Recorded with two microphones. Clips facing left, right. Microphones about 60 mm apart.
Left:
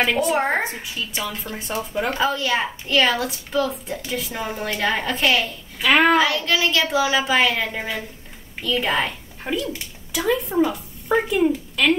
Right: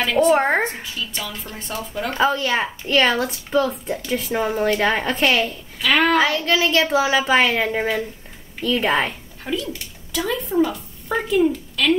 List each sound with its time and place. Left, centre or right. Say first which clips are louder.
0.0 s a woman's voice: right 3 dB; centre
2.1 s speech: right 4 dB; centre
5.8 s a sound: left 2 dB; centre
6.1 s a child's voice: right 1 dB; centre
6.8 s speech: right 2 dB; centre
7.1 s a woman's voice: right 2 dB; centre
7.4 s a woman's voice: right 3 dB; centre
9.4 s a child's voice: left 1 dB; centre